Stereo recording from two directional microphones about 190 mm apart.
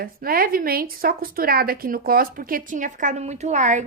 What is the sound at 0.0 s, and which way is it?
A woman's voice, 50° right (ahead or behind).